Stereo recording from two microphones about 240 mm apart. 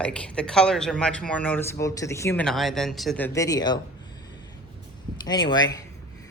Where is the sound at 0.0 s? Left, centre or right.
Centre.